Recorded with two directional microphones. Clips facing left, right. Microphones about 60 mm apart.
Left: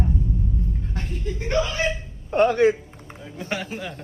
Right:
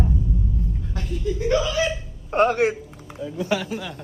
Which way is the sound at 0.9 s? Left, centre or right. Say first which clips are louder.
Right 4 dB; left.